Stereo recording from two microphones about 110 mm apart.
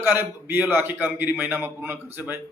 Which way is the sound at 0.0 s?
20° right (ahead or behind).